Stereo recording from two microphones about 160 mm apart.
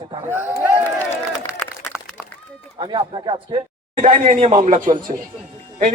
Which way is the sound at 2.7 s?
30° right (ahead or behind).